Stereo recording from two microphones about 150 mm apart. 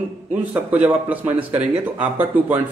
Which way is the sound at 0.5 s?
10° right (ahead or behind).